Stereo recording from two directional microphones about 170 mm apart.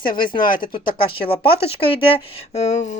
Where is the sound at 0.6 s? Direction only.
30° left (ahead or behind).